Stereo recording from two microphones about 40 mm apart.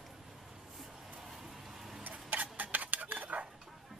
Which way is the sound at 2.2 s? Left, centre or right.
Right.